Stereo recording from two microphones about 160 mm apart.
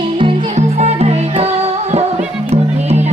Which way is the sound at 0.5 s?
40° right (ahead or behind).